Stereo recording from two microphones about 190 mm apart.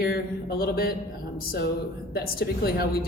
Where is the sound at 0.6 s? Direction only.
50° left (ahead or behind).